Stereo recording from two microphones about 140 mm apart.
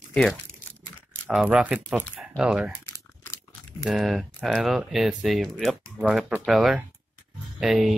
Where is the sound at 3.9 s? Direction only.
Centre (ahead or behind).